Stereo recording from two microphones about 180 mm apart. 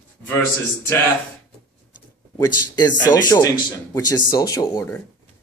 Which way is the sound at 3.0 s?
20° left (ahead or behind).